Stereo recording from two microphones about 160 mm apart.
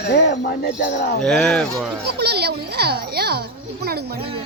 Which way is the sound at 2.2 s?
90° right.